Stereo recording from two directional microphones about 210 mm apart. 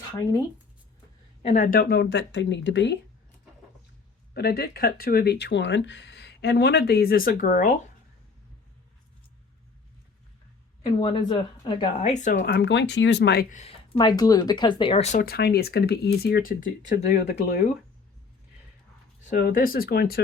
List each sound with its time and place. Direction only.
1.4 s speech: 35° left (ahead or behind); by 3.0 s 60° left (ahead or behind)
4.4 s speech: 50° left (ahead or behind)
11.0 s speech: 20° left (ahead or behind)
12.4 s speech: 50° left (ahead or behind); by 13.7 s 35° left (ahead or behind)
13.9 s speech: 20° left (ahead or behind); by 17.6 s 50° left (ahead or behind)
19.3 s speech: 45° left (ahead or behind)